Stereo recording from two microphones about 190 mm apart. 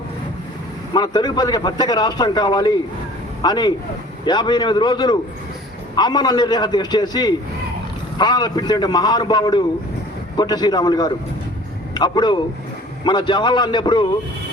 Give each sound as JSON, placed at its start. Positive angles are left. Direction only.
{"t": 0.9, "sound": "a man's voice", "side_deg": 20}